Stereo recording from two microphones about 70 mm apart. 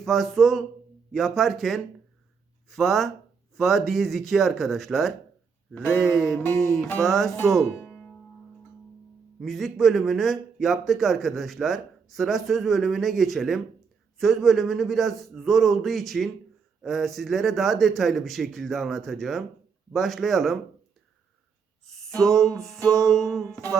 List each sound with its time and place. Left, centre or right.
0.0 s a man's voice: centre
6.1 s a man's voice: centre
7.8 s music: left
9.4 s a man's voice: centre
21.8 s a sound: centre
22.5 s a man's voice: centre